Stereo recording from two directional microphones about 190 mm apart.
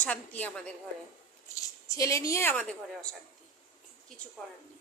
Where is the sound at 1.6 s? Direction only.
15° left (ahead or behind).